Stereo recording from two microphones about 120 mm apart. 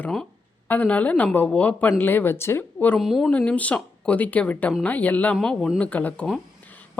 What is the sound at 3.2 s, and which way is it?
Speech, 10° left (ahead or behind).